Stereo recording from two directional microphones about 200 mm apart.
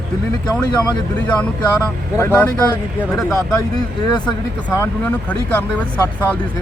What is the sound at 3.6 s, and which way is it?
Speech, 20° left (ahead or behind).